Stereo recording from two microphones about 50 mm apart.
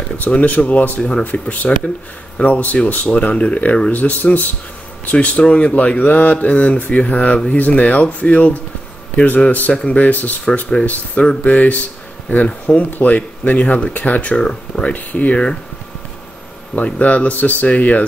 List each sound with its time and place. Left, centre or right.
0.3 s speech: left
3.9 s speech: left
5.2 s speech: left
9.7 s speech: centre
12.4 s speech: left
14.3 s speech: centre
16.7 s speech: left